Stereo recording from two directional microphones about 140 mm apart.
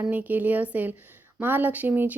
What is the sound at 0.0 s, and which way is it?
Speech, 10° right (ahead or behind).